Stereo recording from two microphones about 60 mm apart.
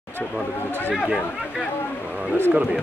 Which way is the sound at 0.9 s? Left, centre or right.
Centre.